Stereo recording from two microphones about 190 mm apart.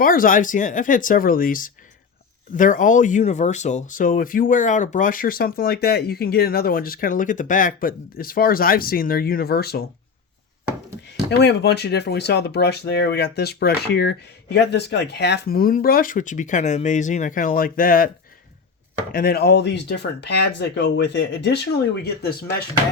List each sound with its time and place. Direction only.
0.0 s speech: 45° left (ahead or behind)
11.3 s speech: 60° left (ahead or behind)
19.1 s speech: 55° left (ahead or behind)